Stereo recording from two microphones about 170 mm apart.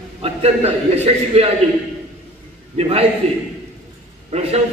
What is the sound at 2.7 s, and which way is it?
Speech, 35° right (ahead or behind).